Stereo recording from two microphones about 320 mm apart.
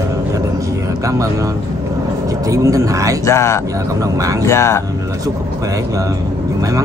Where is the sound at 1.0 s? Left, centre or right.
Centre.